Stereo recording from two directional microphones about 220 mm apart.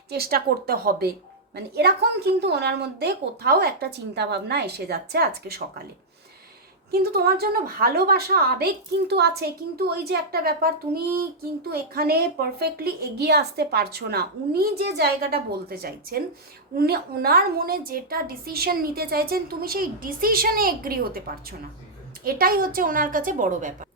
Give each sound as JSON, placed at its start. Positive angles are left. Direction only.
{"t": 0.1, "sound": "a woman's voice", "side_deg": -45}
{"t": 6.9, "sound": "a woman's voice", "side_deg": -45}
{"t": 22.2, "sound": "a woman's voice", "side_deg": -40}